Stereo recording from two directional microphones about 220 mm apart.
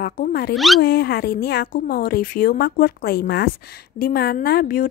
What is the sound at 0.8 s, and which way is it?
A woman's voice, 45° left (ahead or behind).